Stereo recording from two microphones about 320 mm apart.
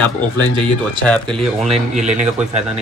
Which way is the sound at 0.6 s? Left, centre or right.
Centre.